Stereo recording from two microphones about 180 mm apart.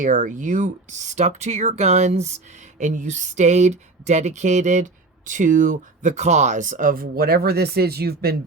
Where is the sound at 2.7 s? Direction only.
45° right (ahead or behind).